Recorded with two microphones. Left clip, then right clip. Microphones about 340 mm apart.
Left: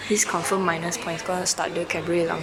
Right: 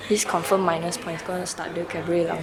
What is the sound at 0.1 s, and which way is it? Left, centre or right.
Speech, centre.